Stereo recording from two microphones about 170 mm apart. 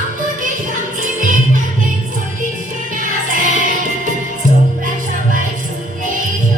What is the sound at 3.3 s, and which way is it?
Music, 50° right (ahead or behind).